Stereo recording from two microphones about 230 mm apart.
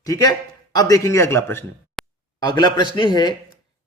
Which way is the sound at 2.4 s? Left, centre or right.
Centre.